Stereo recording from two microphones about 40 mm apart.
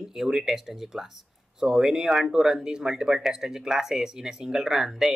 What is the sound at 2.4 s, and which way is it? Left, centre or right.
Speech, centre.